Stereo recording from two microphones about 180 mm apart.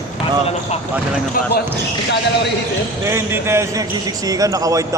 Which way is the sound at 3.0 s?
15° right (ahead or behind).